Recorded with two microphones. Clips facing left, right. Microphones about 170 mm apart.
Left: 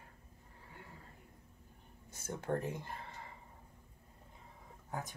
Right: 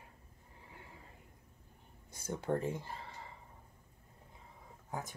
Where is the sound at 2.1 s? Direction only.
15° right (ahead or behind).